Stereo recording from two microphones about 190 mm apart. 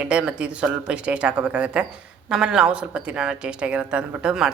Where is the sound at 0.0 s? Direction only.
5° right (ahead or behind).